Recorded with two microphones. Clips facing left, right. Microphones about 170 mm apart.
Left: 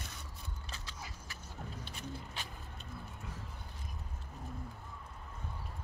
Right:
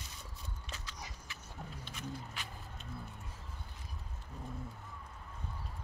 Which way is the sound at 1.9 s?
30° left (ahead or behind).